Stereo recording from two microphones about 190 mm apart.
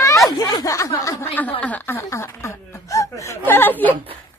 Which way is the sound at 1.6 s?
10° left (ahead or behind).